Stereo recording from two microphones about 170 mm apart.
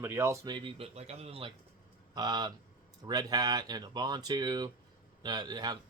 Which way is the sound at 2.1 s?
25° right (ahead or behind).